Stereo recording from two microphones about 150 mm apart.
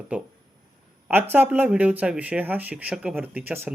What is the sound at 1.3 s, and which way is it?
Speech, 15° right (ahead or behind).